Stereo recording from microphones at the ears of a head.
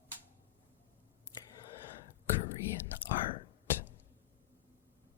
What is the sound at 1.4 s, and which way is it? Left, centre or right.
Whispering, left.